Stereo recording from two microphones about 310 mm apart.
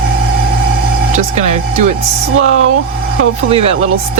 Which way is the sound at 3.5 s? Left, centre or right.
Centre.